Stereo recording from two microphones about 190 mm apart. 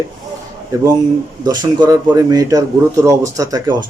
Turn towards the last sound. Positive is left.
turn(degrees=-20)  # may be behind; listen again after turning